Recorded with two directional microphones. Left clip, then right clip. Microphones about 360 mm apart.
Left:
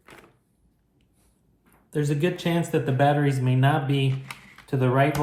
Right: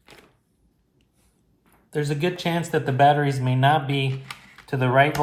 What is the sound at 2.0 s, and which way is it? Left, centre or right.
Speech, centre.